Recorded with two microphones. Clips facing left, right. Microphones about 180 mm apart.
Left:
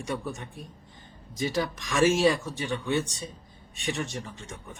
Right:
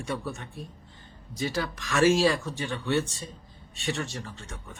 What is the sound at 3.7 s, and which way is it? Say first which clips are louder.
Speech: even; 20° left (ahead or behind).